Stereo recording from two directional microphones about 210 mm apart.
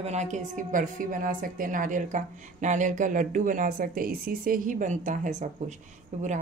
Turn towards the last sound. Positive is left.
turn(degrees=-35)  # may be behind; listen again after turning